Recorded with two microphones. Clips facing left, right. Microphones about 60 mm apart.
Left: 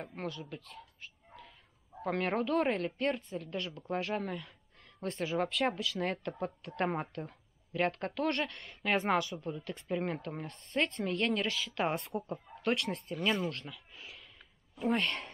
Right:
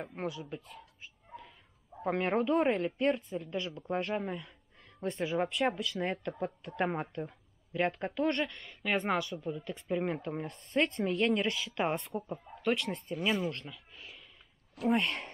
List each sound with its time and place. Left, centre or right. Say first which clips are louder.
0.0 s speech: right 3 dB; right
2.0 s a woman's voice: right 2 dB; centre
8.4 s a woman's voice: right 1 dB; centre